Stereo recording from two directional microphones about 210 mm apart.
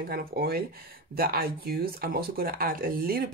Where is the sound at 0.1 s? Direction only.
45° right (ahead or behind).